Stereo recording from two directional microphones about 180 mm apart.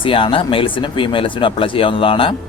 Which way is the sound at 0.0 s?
30° left (ahead or behind).